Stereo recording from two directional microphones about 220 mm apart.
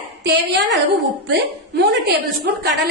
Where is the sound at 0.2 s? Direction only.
50° right (ahead or behind).